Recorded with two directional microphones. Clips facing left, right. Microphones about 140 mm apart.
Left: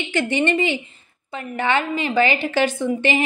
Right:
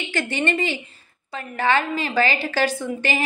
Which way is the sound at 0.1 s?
20° left (ahead or behind).